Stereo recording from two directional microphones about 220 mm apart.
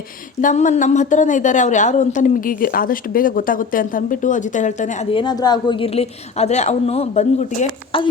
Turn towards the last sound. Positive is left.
turn(degrees=30)  # may be behind; listen again after turning